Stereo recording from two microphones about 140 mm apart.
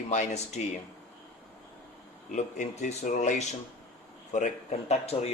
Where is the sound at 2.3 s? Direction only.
60° left (ahead or behind).